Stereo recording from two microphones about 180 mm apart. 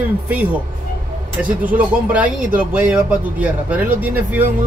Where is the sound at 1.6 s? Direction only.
10° right (ahead or behind).